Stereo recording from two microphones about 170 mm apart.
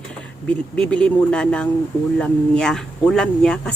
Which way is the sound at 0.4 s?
5° left (ahead or behind).